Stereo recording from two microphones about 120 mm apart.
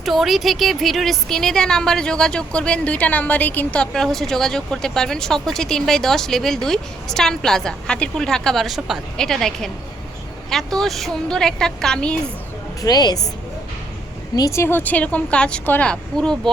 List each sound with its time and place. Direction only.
0.0 s a woman's voice: centre (ahead or behind)
12.8 s a woman's voice: 35° left (ahead or behind)
14.3 s speech: 25° left (ahead or behind); by 16.4 s 5° left (ahead or behind)